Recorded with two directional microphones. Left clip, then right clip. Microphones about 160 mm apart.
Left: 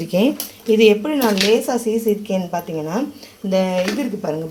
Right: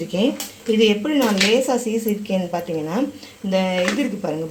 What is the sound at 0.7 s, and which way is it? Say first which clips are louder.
Speech: left 4 dB; 25° left (ahead or behind).